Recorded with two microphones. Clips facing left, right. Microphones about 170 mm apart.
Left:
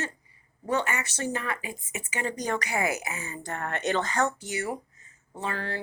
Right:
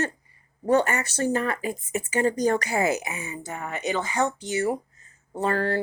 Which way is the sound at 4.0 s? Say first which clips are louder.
Right 2 dB; 15° right (ahead or behind).